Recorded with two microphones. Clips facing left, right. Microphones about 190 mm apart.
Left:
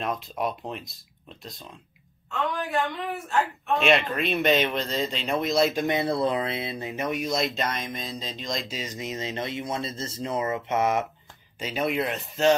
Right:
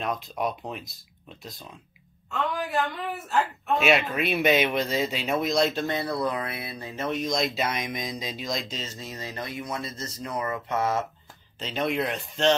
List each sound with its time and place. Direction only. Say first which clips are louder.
0.0 s speech: even; centre (ahead or behind)
3.3 s speech: even; 5° right (ahead or behind)
8.6 s speech: left 3 dB; 10° left (ahead or behind)
11.6 s speech: left 1 dB; 5° left (ahead or behind)